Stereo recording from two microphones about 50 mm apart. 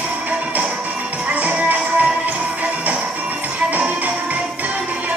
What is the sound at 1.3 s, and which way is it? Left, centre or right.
Music, right.